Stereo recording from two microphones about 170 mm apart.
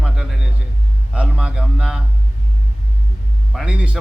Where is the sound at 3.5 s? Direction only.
5° right (ahead or behind).